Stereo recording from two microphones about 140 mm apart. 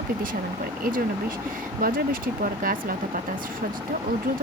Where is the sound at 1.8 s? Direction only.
90° right.